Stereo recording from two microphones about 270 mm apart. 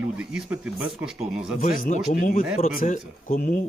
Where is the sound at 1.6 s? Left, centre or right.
Left.